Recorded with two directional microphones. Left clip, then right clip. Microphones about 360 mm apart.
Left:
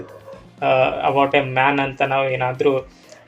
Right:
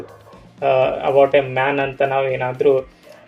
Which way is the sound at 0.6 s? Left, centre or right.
Centre.